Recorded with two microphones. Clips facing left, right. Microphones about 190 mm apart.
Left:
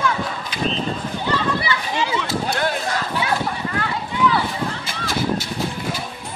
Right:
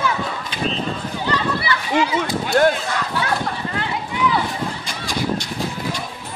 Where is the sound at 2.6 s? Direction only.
45° right (ahead or behind).